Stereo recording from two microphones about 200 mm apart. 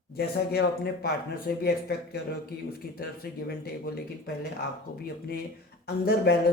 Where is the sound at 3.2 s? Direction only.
50° left (ahead or behind).